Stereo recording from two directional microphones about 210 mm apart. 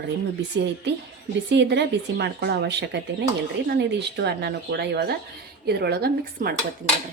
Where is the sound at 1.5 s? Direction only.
55° right (ahead or behind).